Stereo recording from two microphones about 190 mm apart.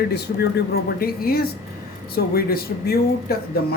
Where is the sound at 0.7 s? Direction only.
55° left (ahead or behind).